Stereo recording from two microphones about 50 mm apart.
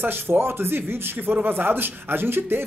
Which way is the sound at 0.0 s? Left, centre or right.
Right.